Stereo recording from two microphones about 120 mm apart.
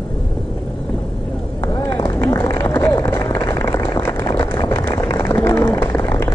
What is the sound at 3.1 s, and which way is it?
Vehicle, 20° left (ahead or behind).